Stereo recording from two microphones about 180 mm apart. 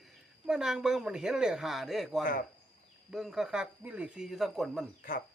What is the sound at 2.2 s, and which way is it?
Speech, 50° left (ahead or behind).